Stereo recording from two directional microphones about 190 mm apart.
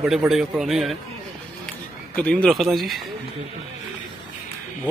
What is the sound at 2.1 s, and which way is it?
Speech, 5° left (ahead or behind).